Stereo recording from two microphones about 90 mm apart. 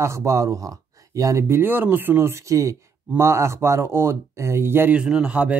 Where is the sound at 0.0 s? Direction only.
35° right (ahead or behind).